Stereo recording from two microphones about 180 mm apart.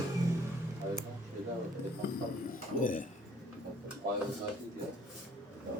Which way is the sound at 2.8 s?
50° left (ahead or behind).